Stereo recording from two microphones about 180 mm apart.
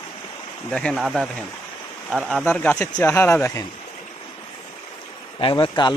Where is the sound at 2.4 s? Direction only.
10° left (ahead or behind).